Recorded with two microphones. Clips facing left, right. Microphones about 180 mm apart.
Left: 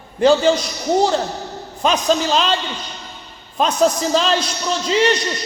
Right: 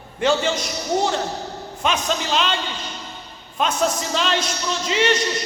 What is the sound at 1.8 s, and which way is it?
Speech, 35° left (ahead or behind).